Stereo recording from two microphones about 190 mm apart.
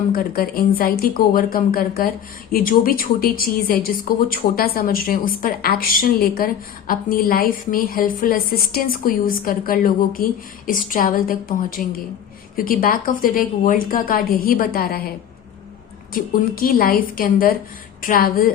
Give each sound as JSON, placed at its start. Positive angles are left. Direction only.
{"t": 0.1, "sound": "a woman's voice", "side_deg": 50}
{"t": 16.1, "sound": "a woman's voice", "side_deg": 50}